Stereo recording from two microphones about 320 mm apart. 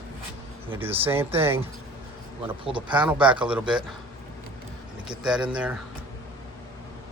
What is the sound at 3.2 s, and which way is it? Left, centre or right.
Speech, centre.